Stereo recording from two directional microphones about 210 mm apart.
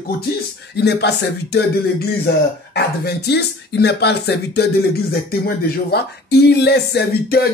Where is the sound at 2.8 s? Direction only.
50° left (ahead or behind).